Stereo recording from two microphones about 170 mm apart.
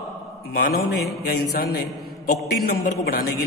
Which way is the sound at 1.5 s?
65° left (ahead or behind).